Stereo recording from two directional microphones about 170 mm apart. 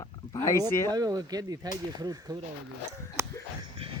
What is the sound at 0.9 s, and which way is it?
Speech, 20° right (ahead or behind).